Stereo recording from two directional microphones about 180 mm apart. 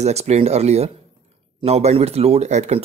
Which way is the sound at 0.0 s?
35° right (ahead or behind).